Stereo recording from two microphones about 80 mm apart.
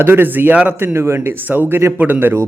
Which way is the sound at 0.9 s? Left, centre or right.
Right.